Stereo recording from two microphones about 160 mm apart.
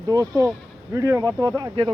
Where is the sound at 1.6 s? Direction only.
30° right (ahead or behind).